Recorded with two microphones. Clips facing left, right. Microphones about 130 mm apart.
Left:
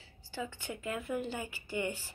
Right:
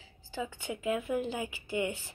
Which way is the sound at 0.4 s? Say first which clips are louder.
Right 3 dB; 10° right (ahead or behind).